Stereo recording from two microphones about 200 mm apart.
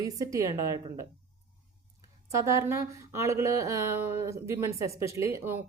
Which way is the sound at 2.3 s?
15° right (ahead or behind).